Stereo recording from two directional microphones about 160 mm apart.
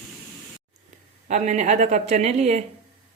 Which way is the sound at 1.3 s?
50° right (ahead or behind).